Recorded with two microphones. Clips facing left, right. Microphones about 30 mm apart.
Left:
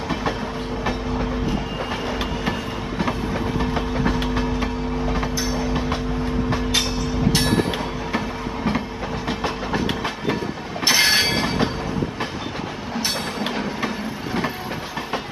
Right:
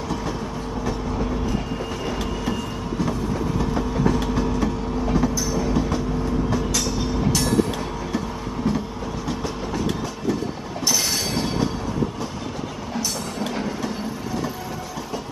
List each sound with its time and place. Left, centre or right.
2.4 s train: left
8.6 s train: left
13.0 s train: left